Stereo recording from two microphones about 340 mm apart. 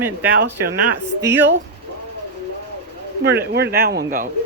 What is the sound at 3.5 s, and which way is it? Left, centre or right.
Speech, right.